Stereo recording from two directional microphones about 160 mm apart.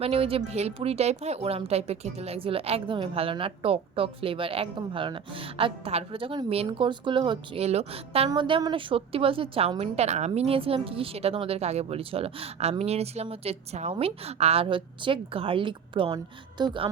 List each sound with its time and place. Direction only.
0.0 s speech: 35° right (ahead or behind)